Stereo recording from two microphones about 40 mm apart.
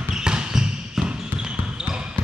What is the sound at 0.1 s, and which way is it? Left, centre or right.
Basketball bounce, centre.